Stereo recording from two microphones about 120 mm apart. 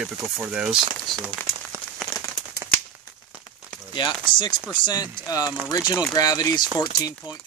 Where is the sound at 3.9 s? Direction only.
40° left (ahead or behind).